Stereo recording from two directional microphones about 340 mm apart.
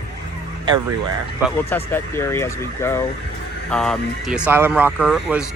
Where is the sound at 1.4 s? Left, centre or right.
Centre.